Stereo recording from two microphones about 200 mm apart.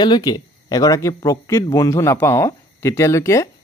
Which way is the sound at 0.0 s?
20° left (ahead or behind).